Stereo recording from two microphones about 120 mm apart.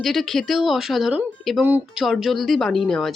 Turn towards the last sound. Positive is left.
turn(degrees=5)  # may be behind; listen again after turning